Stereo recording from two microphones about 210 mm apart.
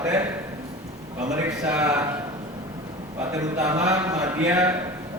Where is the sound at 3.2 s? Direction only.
15° right (ahead or behind).